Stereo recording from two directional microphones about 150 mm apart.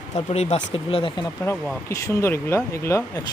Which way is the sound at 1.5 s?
20° left (ahead or behind).